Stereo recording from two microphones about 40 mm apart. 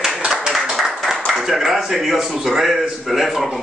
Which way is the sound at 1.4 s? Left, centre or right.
Centre.